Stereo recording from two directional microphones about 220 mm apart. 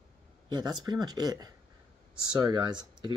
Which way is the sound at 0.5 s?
20° right (ahead or behind).